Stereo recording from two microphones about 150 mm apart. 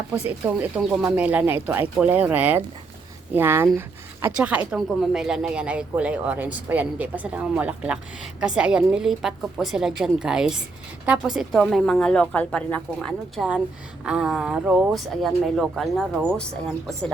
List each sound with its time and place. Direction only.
0.1 s a woman's voice: 10° right (ahead or behind)